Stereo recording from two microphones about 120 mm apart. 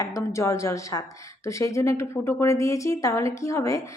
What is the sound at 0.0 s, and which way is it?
A woman's voice, 25° left (ahead or behind).